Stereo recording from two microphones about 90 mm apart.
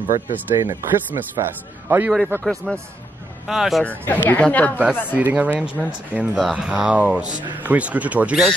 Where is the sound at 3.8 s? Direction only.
20° left (ahead or behind).